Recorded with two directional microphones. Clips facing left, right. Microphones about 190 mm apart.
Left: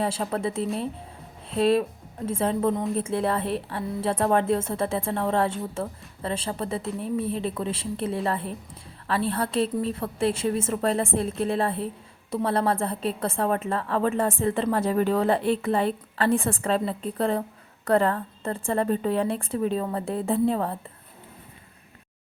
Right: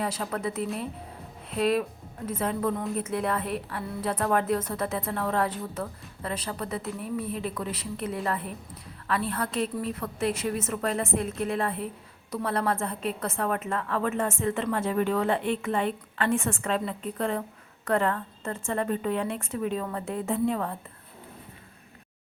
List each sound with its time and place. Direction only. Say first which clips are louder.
0.0 s a woman's voice: left 4 dB; 30° left (ahead or behind)